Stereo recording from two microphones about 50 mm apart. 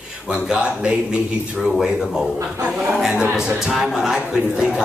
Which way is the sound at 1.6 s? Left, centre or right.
Centre.